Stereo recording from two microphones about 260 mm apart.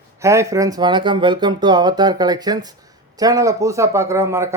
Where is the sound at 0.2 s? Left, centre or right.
Centre.